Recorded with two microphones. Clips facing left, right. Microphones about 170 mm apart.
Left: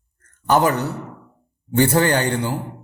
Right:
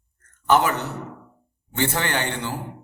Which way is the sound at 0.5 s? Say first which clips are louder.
Left 3 dB; 40° left (ahead or behind).